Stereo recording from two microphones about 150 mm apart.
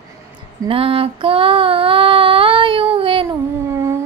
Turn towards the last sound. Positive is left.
turn(degrees=-20)  # may be behind; listen again after turning